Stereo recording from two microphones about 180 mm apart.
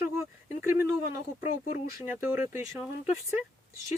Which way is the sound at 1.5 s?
50° left (ahead or behind).